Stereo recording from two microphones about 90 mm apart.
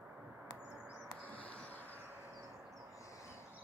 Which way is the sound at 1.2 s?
15° left (ahead or behind).